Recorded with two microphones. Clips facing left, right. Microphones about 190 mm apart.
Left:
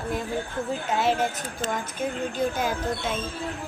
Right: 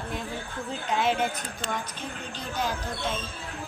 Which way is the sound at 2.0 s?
50° left (ahead or behind).